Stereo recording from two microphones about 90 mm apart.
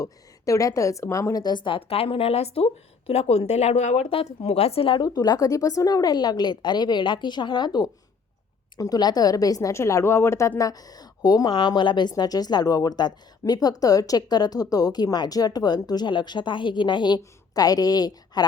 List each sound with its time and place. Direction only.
0.0 s a woman's voice: 40° left (ahead or behind)
1.3 s speech: 50° left (ahead or behind); by 2.6 s 90° left
4.1 s a woman's voice: 90° left; by 10.5 s 30° left (ahead or behind)
10.6 s speech: 45° left (ahead or behind)